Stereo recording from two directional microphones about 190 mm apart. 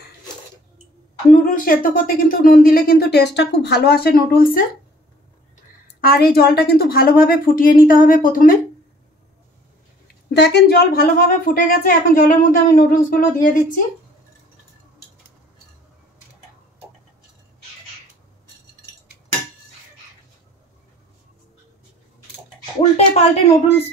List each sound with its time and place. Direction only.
1.3 s speech: 45° left (ahead or behind)
5.9 s speech: 50° left (ahead or behind)
10.3 s speech: 60° left (ahead or behind); by 13.6 s 45° left (ahead or behind)
22.9 s a sound: 35° left (ahead or behind)